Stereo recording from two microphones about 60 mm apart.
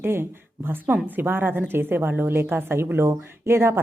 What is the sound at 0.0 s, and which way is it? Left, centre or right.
Speech, right.